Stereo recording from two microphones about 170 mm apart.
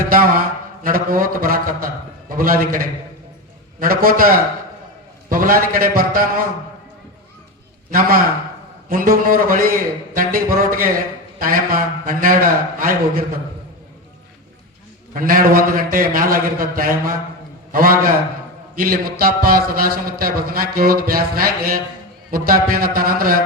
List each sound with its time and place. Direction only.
0.0 s a man's voice: 55° right (ahead or behind)
7.9 s a man's voice: 55° right (ahead or behind)
15.1 s a man's voice: 55° right (ahead or behind)